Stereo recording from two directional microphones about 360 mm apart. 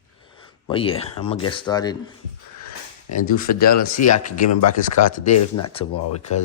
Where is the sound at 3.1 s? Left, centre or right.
Left.